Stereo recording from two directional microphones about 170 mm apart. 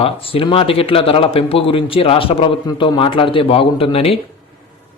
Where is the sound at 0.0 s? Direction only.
35° left (ahead or behind).